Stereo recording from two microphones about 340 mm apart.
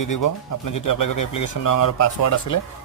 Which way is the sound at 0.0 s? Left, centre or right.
Left.